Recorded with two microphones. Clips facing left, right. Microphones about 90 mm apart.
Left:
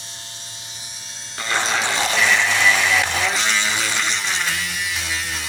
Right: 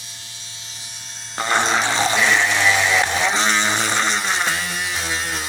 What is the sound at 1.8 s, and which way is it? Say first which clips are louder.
Vehicle: right 1 dB; 25° right (ahead or behind).